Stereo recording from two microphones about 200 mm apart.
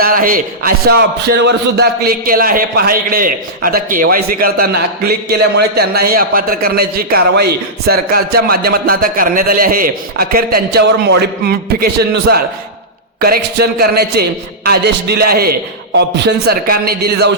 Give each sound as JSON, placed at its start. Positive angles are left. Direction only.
{"t": 0.0, "sound": "a man's voice", "side_deg": -45}